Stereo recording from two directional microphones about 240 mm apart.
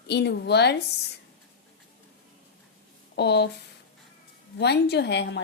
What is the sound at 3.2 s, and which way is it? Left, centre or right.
Speech, left.